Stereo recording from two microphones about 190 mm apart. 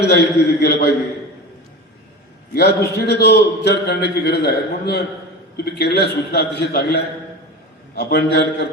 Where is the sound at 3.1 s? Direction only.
60° left (ahead or behind).